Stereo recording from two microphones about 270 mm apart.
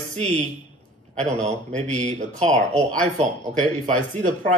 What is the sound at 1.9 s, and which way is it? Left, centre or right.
Speech, right.